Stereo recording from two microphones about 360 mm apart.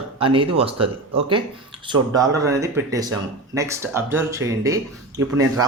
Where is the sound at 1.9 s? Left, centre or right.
Centre.